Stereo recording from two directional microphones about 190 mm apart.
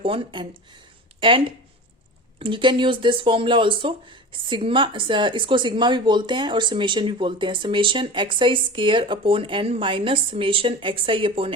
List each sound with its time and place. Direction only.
0.0 s speech: 30° right (ahead or behind)